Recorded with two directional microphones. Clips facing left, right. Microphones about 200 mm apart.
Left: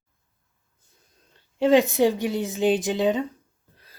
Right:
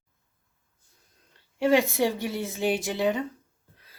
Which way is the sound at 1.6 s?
20° left (ahead or behind).